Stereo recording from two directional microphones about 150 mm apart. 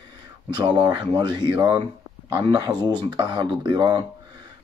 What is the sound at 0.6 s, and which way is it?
Speech, 30° right (ahead or behind).